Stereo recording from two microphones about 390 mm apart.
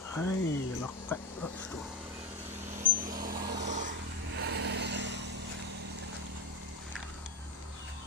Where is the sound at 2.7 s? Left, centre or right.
Centre.